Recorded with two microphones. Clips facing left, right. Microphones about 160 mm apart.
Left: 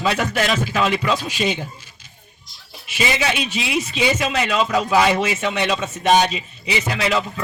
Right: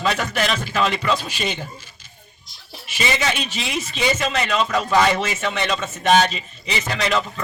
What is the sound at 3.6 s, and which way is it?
A man's voice, 5° left (ahead or behind).